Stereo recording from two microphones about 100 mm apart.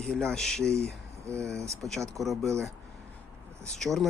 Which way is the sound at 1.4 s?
30° right (ahead or behind).